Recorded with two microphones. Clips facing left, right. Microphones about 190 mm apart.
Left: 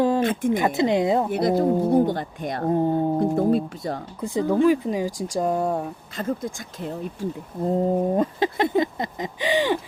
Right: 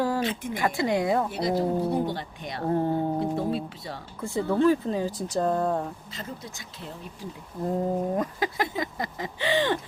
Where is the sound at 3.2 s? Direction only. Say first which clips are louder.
Left 7 dB; 45° left (ahead or behind).